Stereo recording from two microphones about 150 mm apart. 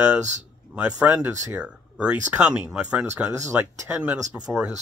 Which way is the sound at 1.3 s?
20° right (ahead or behind).